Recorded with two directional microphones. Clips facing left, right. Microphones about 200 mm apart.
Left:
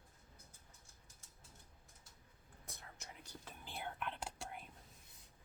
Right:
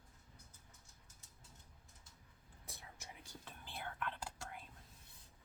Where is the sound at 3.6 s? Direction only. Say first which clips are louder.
Even; 15° left (ahead or behind).